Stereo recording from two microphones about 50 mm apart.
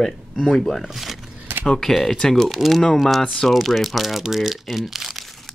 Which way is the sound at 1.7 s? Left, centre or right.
Centre.